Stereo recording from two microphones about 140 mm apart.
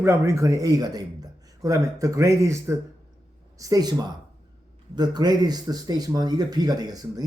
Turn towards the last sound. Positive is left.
turn(degrees=-25)  # may be behind; listen again after turning